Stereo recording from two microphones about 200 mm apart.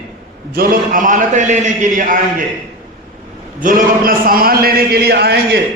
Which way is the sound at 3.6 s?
40° right (ahead or behind).